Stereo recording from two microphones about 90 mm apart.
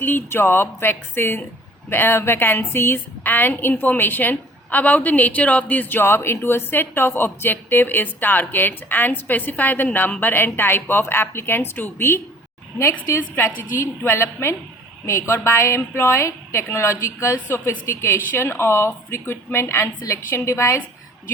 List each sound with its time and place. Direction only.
0.0 s a woman's voice: 20° left (ahead or behind)